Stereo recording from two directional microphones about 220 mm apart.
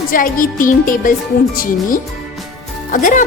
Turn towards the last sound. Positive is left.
turn(degrees=35)  # may be behind; listen again after turning